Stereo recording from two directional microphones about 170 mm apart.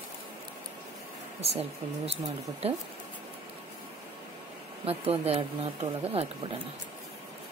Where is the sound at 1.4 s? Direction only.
40° right (ahead or behind).